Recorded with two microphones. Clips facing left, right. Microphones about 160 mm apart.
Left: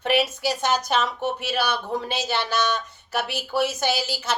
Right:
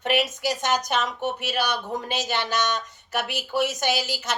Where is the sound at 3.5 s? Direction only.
15° right (ahead or behind).